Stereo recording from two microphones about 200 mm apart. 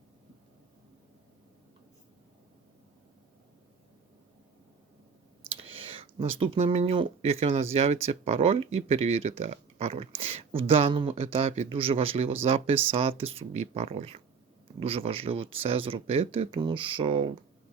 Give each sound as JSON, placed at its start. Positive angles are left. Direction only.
{"t": 5.7, "sound": "speech", "side_deg": -25}